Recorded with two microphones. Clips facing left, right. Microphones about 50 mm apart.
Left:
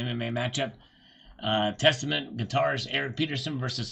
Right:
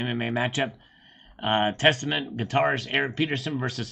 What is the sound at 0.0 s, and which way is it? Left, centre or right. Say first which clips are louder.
Speech: right 4 dB; right.